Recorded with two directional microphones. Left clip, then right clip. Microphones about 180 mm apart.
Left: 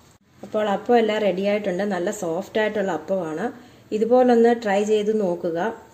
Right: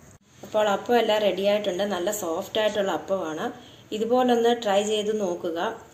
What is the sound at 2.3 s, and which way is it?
Speech, 40° left (ahead or behind).